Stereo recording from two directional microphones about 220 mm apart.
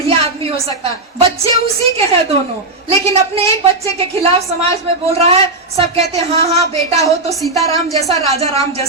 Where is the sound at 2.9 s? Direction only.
25° right (ahead or behind).